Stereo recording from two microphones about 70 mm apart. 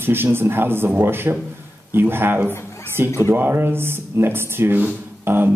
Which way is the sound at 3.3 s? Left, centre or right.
Right.